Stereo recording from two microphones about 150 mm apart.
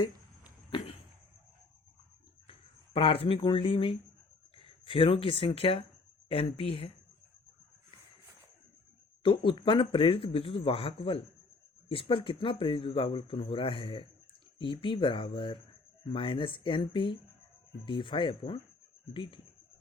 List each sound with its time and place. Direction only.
2.5 s speech: 35° left (ahead or behind)
9.2 s speech: 35° left (ahead or behind)